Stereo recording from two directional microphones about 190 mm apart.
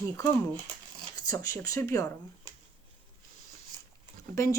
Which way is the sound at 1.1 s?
15° left (ahead or behind).